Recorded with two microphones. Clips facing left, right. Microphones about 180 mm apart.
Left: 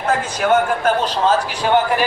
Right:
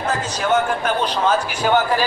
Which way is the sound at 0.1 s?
55° left (ahead or behind).